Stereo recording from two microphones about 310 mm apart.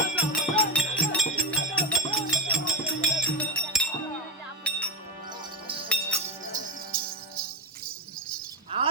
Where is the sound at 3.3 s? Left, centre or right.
Centre.